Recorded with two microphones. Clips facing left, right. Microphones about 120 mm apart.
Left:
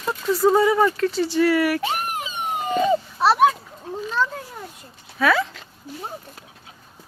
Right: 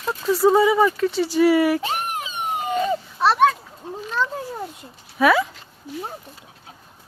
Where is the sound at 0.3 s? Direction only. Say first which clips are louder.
Right 1 dB; 5° right (ahead or behind).